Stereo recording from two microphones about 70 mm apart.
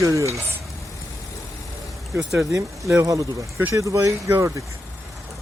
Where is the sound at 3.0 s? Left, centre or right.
Right.